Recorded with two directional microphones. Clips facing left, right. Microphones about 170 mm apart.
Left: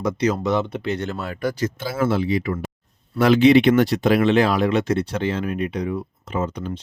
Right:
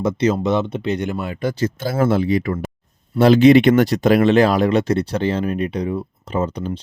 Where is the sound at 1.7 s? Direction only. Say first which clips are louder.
Right 4 dB; 45° right (ahead or behind).